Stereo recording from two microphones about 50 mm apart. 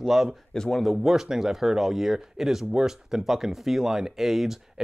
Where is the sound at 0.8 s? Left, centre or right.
Centre.